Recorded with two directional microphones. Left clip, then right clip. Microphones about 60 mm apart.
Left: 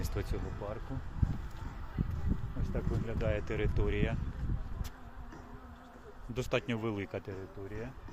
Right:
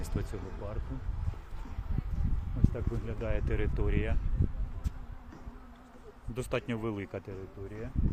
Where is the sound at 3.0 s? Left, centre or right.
Right.